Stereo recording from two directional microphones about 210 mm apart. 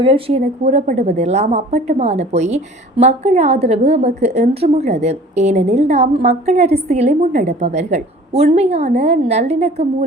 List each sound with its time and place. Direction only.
0.0 s a woman's voice: 25° right (ahead or behind)